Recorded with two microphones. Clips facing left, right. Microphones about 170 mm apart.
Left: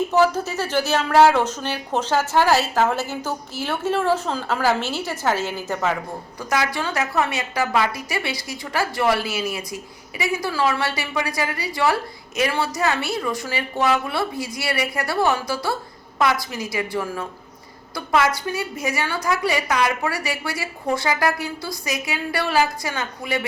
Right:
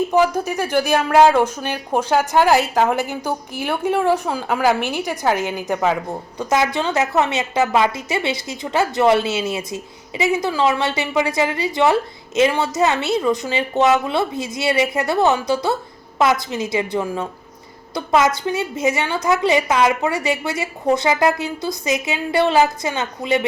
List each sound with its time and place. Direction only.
0.1 s a woman's voice: 15° right (ahead or behind)